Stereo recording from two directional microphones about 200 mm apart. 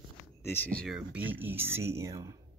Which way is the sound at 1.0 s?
5° right (ahead or behind).